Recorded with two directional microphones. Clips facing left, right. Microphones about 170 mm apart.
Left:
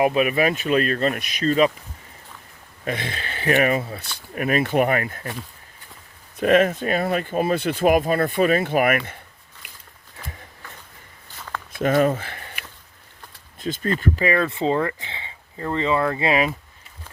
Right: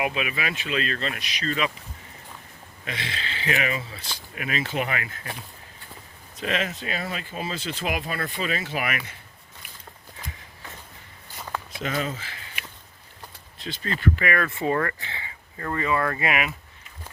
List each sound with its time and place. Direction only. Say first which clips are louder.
0.0 s speech: left 9 dB; 45° left (ahead or behind)
2.8 s speech: left 6 dB; 50° left (ahead or behind)
6.3 s speech: left 11 dB; 50° left (ahead or behind)
11.3 s walk: right 1 dB; 15° right (ahead or behind)
11.8 s speech: left 11 dB; 55° left (ahead or behind)
13.6 s speech: left 7 dB; 50° left (ahead or behind)
14.3 s speech: left 7 dB; 25° left (ahead or behind)